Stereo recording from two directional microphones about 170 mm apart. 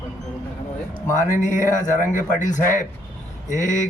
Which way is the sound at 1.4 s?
50° left (ahead or behind).